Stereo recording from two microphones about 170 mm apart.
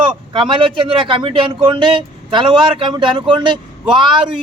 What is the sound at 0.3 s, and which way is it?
A man's voice, 30° right (ahead or behind).